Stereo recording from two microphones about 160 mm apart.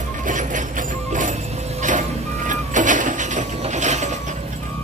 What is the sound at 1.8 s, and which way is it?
Vehicle, 50° right (ahead or behind).